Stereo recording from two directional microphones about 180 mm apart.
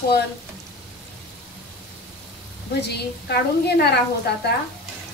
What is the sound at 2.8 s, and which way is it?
A woman's voice, 65° left (ahead or behind).